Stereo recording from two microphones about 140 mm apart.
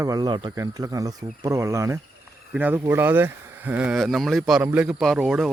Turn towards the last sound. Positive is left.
turn(degrees=0)  # may be behind; listen again after turning